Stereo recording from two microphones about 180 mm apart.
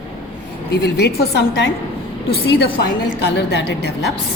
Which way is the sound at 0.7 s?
70° left (ahead or behind).